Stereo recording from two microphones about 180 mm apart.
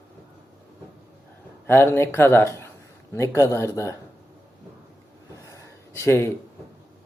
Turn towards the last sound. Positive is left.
turn(degrees=15)  # may be behind; listen again after turning